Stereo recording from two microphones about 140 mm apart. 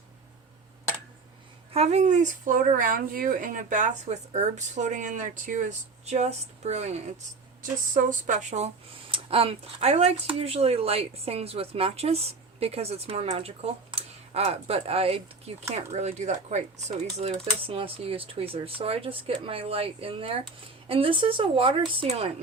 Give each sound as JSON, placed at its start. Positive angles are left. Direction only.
{"t": 1.7, "sound": "speech", "side_deg": -50}
{"t": 7.6, "sound": "speech", "side_deg": -70}
{"t": 9.0, "sound": "speech", "side_deg": -40}